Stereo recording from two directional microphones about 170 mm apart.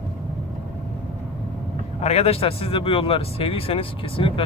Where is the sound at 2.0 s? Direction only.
35° left (ahead or behind).